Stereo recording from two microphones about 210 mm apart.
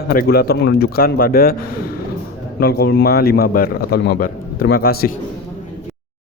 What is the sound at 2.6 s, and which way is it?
A man's voice, 50° left (ahead or behind).